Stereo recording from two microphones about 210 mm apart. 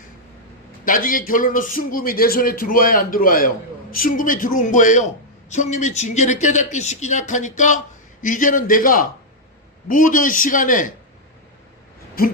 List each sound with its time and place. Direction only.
0.9 s a man's voice: 40° left (ahead or behind)
12.2 s a man's voice: 45° left (ahead or behind)